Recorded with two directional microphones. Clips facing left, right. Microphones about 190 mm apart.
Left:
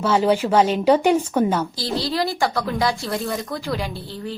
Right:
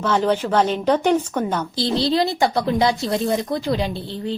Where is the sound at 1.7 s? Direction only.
25° right (ahead or behind).